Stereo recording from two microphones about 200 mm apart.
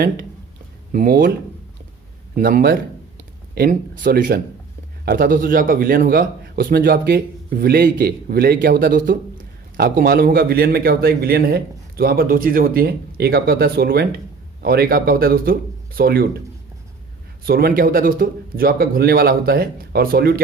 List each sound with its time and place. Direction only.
0.9 s a man's voice: 45° right (ahead or behind)
2.3 s a man's voice: 45° right (ahead or behind)
17.4 s a man's voice: 50° right (ahead or behind)